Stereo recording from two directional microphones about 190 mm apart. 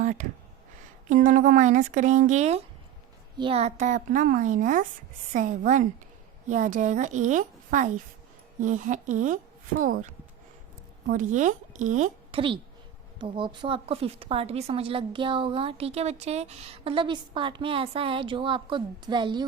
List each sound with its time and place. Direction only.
0.0 s a sound: 40° right (ahead or behind)
1.1 s a woman's voice: 40° right (ahead or behind)
11.1 s speech: 40° right (ahead or behind)
13.1 s a woman's voice: 25° right (ahead or behind)